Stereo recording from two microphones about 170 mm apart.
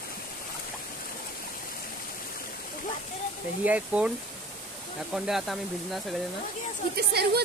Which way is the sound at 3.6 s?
10° right (ahead or behind).